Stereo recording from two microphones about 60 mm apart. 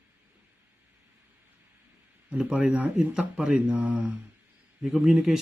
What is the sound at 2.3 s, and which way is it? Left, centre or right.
Speech, centre.